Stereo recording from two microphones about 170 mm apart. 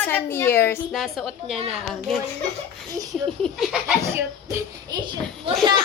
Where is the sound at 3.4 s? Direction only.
Centre (ahead or behind).